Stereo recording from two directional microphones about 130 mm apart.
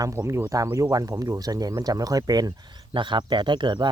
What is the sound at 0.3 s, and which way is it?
Speech, 25° right (ahead or behind).